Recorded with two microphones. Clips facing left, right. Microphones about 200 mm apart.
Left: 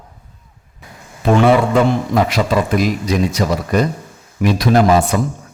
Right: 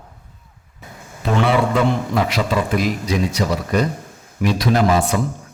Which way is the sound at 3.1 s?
45° left (ahead or behind).